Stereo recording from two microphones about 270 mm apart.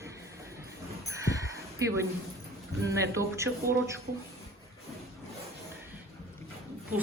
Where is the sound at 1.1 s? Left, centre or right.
Centre.